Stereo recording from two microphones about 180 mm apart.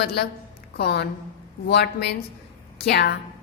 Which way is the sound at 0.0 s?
65° left (ahead or behind).